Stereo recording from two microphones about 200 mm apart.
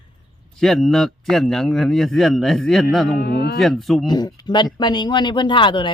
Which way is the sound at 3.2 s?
50° left (ahead or behind).